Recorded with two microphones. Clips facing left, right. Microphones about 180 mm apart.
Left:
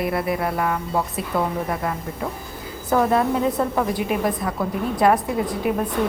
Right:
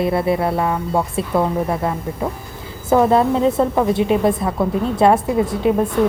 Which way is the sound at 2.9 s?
25° right (ahead or behind).